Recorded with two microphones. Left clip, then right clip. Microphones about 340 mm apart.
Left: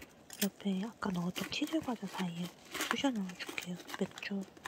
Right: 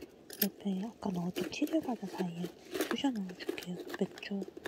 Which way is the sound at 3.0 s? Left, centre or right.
Left.